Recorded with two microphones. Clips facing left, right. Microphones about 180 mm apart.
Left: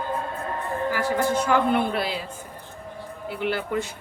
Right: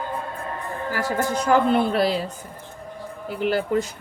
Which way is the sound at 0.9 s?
40° right (ahead or behind).